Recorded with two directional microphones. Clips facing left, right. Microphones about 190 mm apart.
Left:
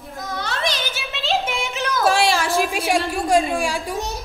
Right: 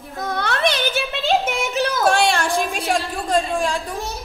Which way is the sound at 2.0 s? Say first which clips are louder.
Left 1 dB; centre (ahead or behind).